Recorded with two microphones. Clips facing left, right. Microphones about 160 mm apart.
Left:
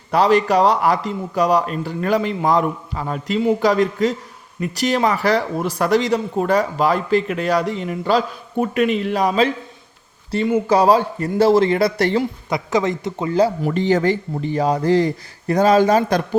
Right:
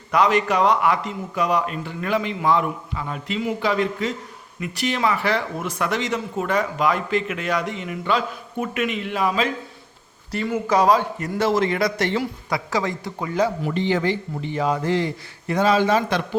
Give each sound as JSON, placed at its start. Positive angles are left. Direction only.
{"t": 0.1, "sound": "speech", "side_deg": 35}
{"t": 12.2, "sound": "speech", "side_deg": 20}
{"t": 13.7, "sound": "speech", "side_deg": 45}